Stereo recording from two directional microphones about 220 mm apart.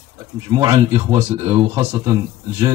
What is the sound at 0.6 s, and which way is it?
Speech, 15° right (ahead or behind).